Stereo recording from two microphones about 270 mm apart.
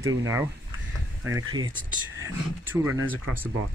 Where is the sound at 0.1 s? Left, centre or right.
Centre.